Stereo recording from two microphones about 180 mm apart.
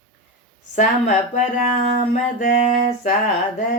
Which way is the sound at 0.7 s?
45° left (ahead or behind).